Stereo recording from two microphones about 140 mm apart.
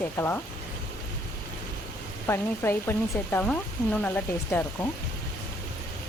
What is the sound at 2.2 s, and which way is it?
A woman's voice, 15° left (ahead or behind).